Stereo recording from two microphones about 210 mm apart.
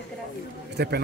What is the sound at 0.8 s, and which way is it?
Speech, 50° right (ahead or behind).